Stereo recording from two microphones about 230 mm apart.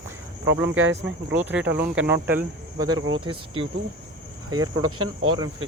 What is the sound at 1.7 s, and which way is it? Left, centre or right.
Cricket, centre.